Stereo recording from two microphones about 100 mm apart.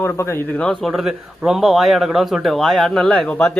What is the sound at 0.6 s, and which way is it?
Speech, 5° left (ahead or behind).